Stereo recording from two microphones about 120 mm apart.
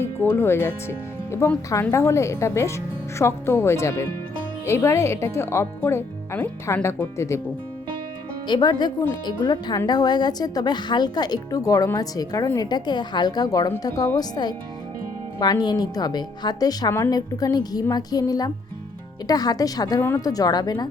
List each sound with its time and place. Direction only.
0.0 s speech: 20° left (ahead or behind)
8.4 s speech: 40° left (ahead or behind)